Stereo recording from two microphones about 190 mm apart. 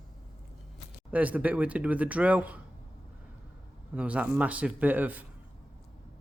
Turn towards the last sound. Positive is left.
turn(degrees=-10)  # may be behind; listen again after turning